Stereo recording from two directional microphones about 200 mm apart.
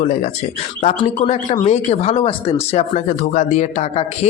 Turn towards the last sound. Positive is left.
turn(degrees=35)  # may be behind; listen again after turning